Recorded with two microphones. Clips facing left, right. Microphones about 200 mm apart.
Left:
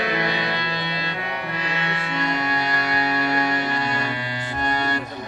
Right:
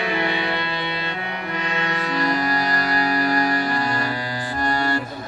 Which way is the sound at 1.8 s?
40° right (ahead or behind).